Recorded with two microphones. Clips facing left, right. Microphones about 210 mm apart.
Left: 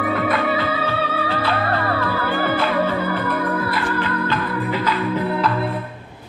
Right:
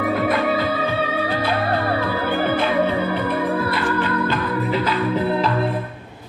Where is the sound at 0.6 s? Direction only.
15° right (ahead or behind).